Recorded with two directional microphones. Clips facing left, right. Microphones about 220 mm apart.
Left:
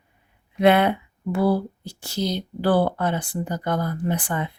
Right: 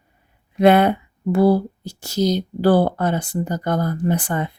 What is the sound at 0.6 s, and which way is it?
A woman's voice, 40° right (ahead or behind).